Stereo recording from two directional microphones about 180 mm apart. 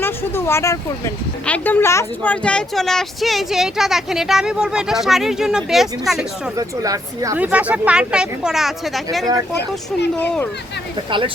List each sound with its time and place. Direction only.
0.0 s speech: 15° left (ahead or behind)
6.6 s speech: 20° right (ahead or behind)
7.3 s speech: 10° right (ahead or behind)
10.2 s speech: 10° left (ahead or behind)